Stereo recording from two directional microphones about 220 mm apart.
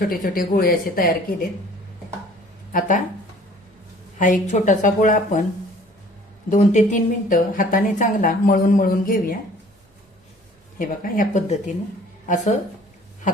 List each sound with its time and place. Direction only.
0.0 s a woman's voice: 40° left (ahead or behind)
2.7 s a woman's voice: 35° left (ahead or behind)
4.2 s a woman's voice: 35° left (ahead or behind)
6.5 s a woman's voice: 35° left (ahead or behind)
10.8 s a woman's voice: 40° left (ahead or behind)